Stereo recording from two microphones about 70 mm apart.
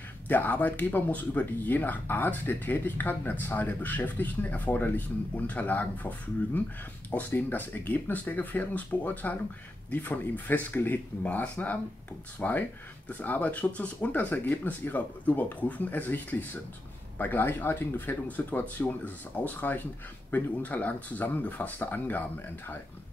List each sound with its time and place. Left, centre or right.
0.3 s speech: left